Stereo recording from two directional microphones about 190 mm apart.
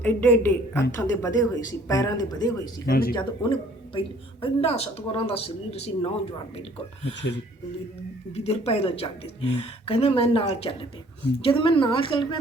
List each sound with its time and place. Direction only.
0.0 s a woman's voice: 10° left (ahead or behind)
2.8 s speech: 50° left (ahead or behind)
3.2 s a woman's voice: 25° left (ahead or behind)
8.4 s a woman's voice: 30° left (ahead or behind)